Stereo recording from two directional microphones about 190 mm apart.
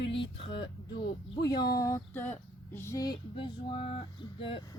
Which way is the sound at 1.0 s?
25° left (ahead or behind).